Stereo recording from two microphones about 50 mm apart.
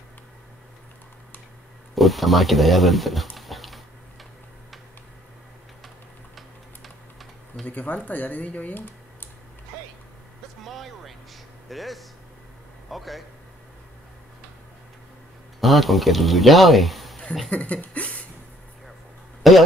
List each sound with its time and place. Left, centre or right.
2.0 s speech: centre
6.3 s typing: centre
7.6 s speech: left
10.6 s vehicle: centre
11.7 s a man's voice: centre
15.6 s a man's voice: centre
17.5 s speech: left
19.4 s speech: centre